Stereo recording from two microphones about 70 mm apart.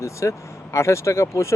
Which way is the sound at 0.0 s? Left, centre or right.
Left.